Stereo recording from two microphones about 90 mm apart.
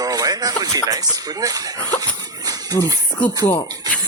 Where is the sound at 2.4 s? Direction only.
45° right (ahead or behind).